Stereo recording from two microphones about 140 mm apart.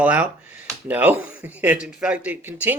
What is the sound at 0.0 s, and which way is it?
Speech, 10° right (ahead or behind).